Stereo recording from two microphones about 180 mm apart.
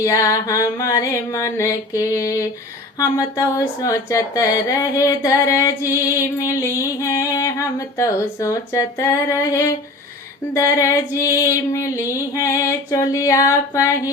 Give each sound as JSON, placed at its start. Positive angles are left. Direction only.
{"t": 0.0, "sound": "music", "side_deg": 20}
{"t": 3.0, "sound": "speech", "side_deg": 20}
{"t": 5.9, "sound": "music", "side_deg": 20}